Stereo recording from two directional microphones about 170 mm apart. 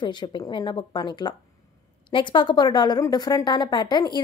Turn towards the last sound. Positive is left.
turn(degrees=25)  # may be behind; listen again after turning